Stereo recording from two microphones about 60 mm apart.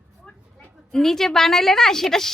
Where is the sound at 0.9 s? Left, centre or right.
Centre.